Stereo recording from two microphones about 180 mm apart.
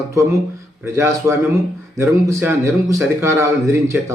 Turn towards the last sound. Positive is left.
turn(degrees=-15)  # may be behind; listen again after turning